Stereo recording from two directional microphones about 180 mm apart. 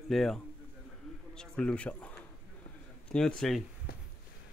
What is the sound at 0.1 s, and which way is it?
Speech, centre (ahead or behind).